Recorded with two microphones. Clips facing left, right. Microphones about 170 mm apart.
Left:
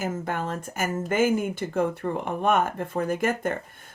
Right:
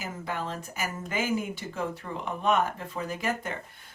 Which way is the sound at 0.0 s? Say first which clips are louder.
Left 5 dB; 50° left (ahead or behind).